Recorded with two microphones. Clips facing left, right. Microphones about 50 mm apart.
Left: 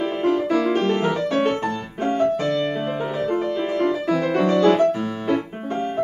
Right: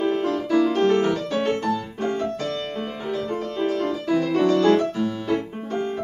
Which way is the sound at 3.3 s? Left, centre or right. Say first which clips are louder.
Left 2 dB; left.